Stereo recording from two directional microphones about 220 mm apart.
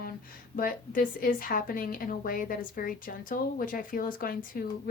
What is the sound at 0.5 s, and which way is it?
A woman's voice, 40° left (ahead or behind).